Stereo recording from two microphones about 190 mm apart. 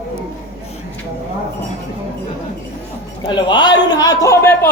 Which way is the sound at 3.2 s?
25° left (ahead or behind).